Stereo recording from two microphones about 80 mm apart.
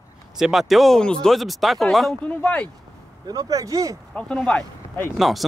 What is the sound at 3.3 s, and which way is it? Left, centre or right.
Speech, right.